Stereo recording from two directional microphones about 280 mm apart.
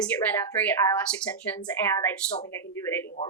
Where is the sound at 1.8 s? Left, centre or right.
Centre.